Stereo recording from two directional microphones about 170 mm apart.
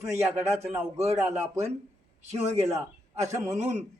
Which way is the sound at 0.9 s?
40° right (ahead or behind).